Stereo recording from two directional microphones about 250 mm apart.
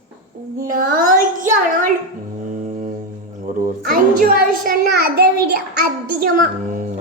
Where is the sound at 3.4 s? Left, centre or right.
Right.